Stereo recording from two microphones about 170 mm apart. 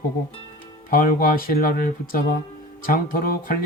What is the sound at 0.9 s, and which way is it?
Speech, 55° left (ahead or behind).